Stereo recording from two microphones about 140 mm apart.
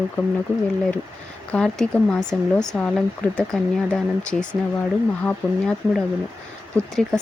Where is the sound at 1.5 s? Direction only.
5° left (ahead or behind).